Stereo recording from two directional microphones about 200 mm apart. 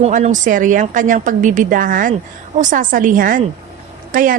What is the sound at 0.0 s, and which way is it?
A woman's voice, 40° right (ahead or behind).